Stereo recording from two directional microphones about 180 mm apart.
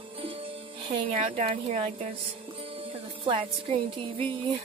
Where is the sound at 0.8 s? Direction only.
30° right (ahead or behind).